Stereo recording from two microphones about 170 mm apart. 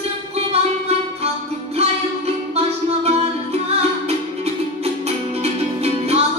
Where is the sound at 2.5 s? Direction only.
40° right (ahead or behind).